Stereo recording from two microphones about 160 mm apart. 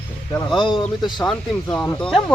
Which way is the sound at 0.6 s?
30° left (ahead or behind).